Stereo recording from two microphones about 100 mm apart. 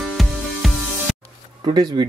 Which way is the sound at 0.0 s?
Centre (ahead or behind).